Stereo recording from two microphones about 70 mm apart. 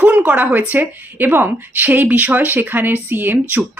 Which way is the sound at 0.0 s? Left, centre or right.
Right.